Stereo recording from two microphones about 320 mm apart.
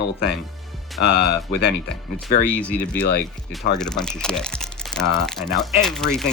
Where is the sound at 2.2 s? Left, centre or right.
Centre.